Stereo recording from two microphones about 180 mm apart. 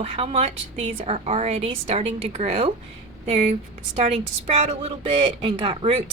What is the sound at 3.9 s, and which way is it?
A woman's voice, 40° right (ahead or behind).